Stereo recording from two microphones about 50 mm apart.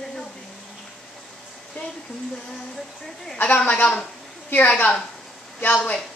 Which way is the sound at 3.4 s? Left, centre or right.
Left.